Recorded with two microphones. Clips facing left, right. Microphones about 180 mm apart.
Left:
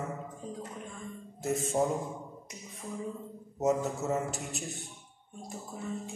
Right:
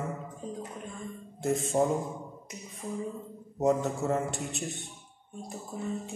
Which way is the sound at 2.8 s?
15° right (ahead or behind).